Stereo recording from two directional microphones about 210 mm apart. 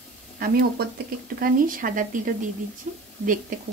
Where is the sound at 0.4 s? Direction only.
45° right (ahead or behind).